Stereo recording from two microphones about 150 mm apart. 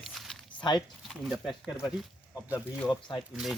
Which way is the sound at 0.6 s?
30° left (ahead or behind).